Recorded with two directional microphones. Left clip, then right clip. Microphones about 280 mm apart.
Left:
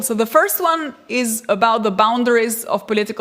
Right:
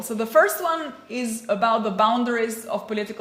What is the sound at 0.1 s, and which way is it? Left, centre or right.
A woman's voice, left.